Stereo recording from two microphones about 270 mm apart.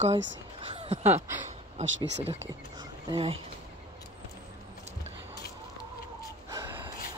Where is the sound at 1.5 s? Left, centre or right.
Right.